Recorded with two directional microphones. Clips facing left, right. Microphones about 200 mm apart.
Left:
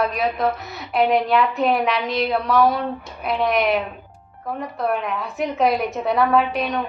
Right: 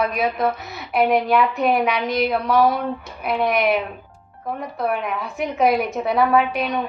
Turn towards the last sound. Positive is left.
turn(degrees=0)  # may be behind; listen again after turning